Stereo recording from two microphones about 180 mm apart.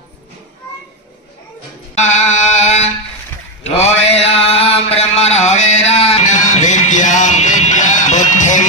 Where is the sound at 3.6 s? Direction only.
35° left (ahead or behind).